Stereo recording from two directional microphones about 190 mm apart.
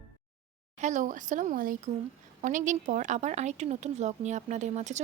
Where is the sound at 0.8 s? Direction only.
40° right (ahead or behind).